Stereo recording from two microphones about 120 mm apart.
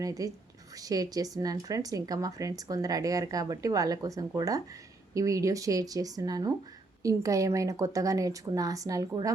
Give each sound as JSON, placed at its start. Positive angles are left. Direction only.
{"t": 0.0, "sound": "a woman's voice", "side_deg": -30}